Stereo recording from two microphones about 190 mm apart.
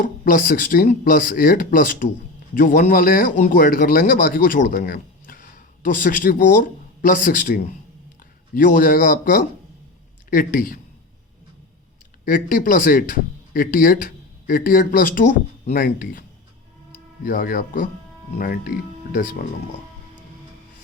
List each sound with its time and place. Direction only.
0.0 s speech: 45° left (ahead or behind)
12.2 s speech: 45° left (ahead or behind)
17.2 s speech: 50° left (ahead or behind)